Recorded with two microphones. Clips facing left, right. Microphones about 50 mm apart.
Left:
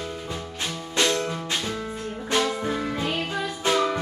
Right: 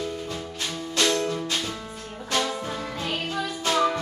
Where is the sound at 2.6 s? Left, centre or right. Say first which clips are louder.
Left 4 dB; left.